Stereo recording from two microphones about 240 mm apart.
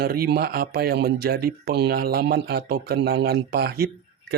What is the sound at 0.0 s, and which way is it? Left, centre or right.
Speech, right.